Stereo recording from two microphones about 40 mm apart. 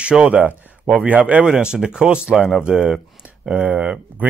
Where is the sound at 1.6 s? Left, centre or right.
Centre.